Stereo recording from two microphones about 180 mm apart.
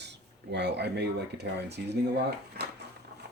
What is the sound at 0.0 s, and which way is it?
Speech, 70° right (ahead or behind).